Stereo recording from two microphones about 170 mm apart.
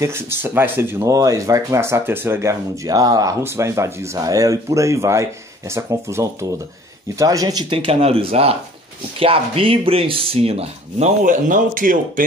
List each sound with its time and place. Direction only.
0.0 s speech: 15° right (ahead or behind); by 12.0 s 50° right (ahead or behind)